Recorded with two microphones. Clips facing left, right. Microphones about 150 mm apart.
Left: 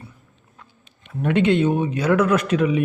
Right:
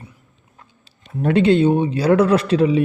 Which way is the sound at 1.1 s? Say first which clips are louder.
Right 3 dB; 35° right (ahead or behind).